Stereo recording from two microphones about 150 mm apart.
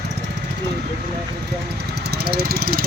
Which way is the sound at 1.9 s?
90° right.